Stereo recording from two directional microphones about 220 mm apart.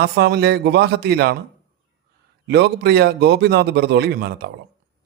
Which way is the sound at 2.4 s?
50° right (ahead or behind).